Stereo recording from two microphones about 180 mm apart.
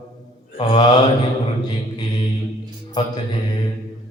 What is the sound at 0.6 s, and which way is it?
Mantra, 25° left (ahead or behind).